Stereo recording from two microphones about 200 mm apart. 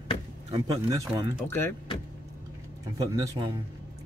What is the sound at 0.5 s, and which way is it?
Speech, 20° right (ahead or behind).